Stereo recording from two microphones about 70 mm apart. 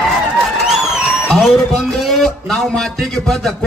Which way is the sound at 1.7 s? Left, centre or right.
Centre.